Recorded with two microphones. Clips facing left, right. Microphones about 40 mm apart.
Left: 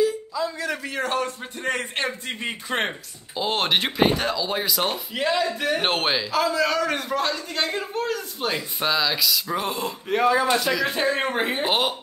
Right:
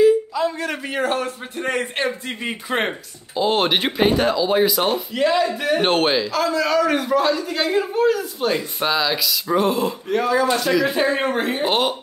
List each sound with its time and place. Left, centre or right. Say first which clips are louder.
0.8 s speech: right 5 dB; centre
1.2 s a man's voice: right 2 dB; centre
10.0 s speech: even; centre
10.6 s a man's voice: right 4 dB; centre
11.3 s speech: right 2 dB; centre
11.6 s a man's voice: right 5 dB; centre